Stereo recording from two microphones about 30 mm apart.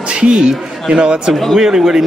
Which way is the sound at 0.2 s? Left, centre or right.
Right.